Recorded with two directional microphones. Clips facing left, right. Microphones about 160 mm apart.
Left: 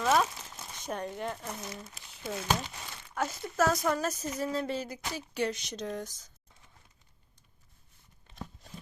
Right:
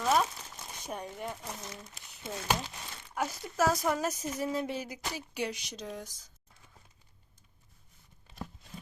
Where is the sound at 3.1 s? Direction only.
10° right (ahead or behind).